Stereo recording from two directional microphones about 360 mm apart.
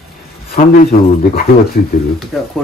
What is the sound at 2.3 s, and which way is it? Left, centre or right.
Speech, centre.